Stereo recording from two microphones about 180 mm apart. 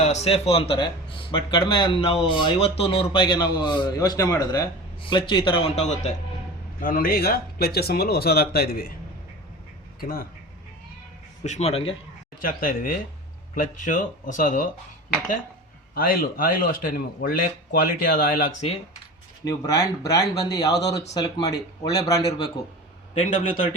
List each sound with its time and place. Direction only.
0.0 s a man's voice: 40° left (ahead or behind)
5.8 s speech: 40° left (ahead or behind)
6.8 s speech: 55° left (ahead or behind)
10.0 s speech: 55° left (ahead or behind)
11.4 s speech: 40° left (ahead or behind)
12.4 s speech: 55° left (ahead or behind)
16.0 s speech: 55° left (ahead or behind)
19.4 s a man's voice: 20° left (ahead or behind)
23.1 s speech: 30° left (ahead or behind)